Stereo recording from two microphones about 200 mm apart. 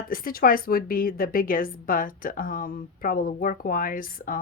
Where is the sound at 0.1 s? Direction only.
45° left (ahead or behind).